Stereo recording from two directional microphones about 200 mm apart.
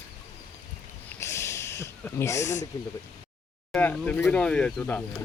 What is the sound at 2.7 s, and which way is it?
Speech, 15° left (ahead or behind).